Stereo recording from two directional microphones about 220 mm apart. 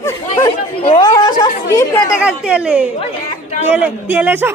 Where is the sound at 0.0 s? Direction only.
15° left (ahead or behind).